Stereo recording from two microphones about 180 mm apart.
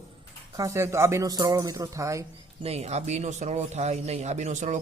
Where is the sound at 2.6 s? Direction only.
35° right (ahead or behind).